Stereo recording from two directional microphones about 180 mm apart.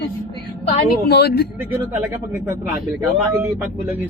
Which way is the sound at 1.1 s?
65° left (ahead or behind).